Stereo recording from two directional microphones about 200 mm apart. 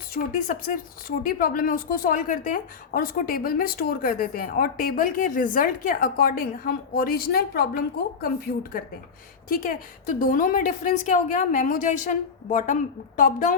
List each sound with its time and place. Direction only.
0.1 s a woman's voice: 40° left (ahead or behind)
9.5 s a woman's voice: 45° left (ahead or behind)